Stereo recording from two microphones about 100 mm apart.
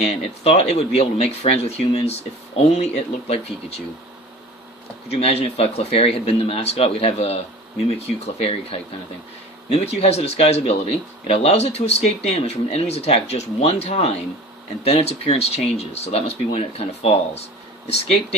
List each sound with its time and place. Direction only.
0.0 s speech: 90° left
5.1 s speech: 90° left